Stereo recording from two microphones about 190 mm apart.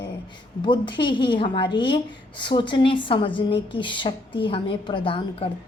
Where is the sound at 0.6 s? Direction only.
25° left (ahead or behind).